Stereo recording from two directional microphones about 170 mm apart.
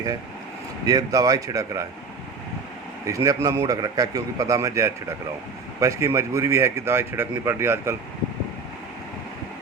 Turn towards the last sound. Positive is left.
turn(degrees=-15)  # may be behind; listen again after turning